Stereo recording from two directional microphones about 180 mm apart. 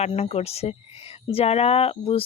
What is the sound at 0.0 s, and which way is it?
Speech, 35° left (ahead or behind).